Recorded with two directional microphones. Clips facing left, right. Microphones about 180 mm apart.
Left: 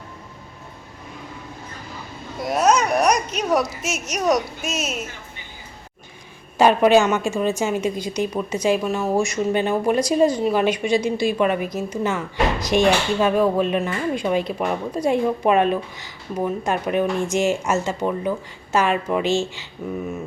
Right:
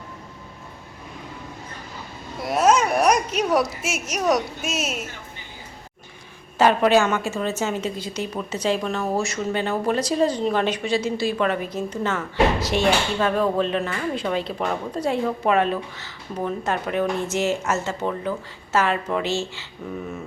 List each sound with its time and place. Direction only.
2.4 s speech: centre (ahead or behind)
6.6 s a woman's voice: 15° left (ahead or behind)